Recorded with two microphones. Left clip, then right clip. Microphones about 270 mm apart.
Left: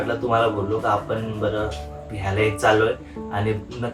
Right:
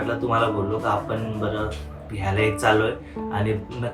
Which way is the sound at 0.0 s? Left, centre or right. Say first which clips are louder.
Left 2 dB; centre.